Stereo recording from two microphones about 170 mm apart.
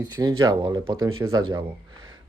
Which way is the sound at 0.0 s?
20° right (ahead or behind).